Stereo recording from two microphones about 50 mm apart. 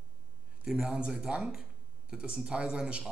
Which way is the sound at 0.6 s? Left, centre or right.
Centre.